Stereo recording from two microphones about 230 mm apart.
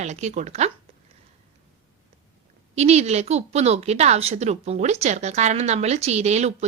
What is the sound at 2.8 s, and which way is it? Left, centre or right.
A woman's voice, right.